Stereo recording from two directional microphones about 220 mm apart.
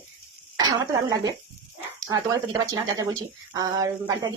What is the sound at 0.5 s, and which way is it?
Speech, 15° right (ahead or behind).